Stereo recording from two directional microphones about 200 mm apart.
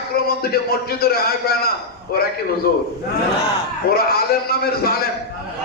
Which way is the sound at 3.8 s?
50° left (ahead or behind).